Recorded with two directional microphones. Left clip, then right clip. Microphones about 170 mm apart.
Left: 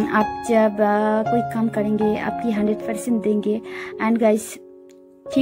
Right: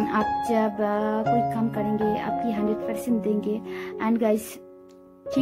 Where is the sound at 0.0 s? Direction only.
30° left (ahead or behind).